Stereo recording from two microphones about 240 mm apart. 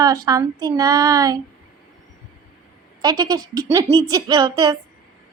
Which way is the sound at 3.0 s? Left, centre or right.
Centre.